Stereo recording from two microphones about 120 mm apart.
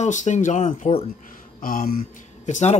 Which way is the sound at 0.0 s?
85° left.